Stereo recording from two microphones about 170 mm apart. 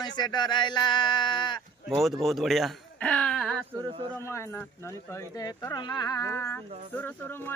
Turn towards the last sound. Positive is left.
turn(degrees=10)  # may be behind; listen again after turning